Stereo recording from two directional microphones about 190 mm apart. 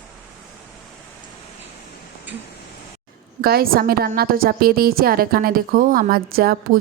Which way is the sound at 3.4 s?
50° right (ahead or behind).